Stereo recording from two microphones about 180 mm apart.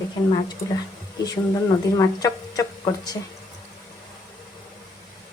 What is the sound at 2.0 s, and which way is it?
A woman's voice, 20° left (ahead or behind).